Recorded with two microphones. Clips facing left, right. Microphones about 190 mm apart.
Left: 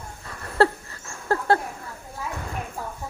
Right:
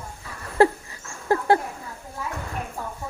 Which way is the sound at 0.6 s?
15° right (ahead or behind).